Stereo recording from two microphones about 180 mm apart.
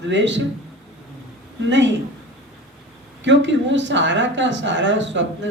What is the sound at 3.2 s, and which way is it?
Speech, 90° right.